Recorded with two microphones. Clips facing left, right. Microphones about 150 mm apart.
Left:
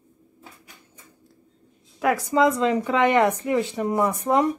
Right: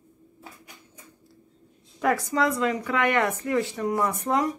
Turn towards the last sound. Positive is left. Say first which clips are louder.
# left 4 dB
turn(degrees=15)  # may be behind; listen again after turning